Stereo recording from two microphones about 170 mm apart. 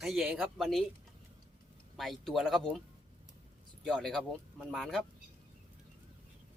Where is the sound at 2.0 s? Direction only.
Centre (ahead or behind).